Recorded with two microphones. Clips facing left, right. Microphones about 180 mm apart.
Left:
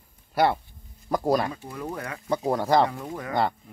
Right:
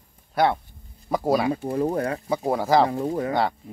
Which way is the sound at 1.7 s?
35° right (ahead or behind).